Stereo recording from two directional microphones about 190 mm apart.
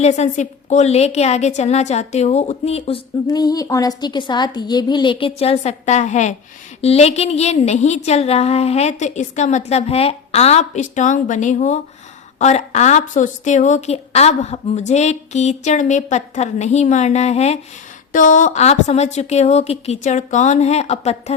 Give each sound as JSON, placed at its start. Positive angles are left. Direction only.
{"t": 0.0, "sound": "a woman's voice", "side_deg": 35}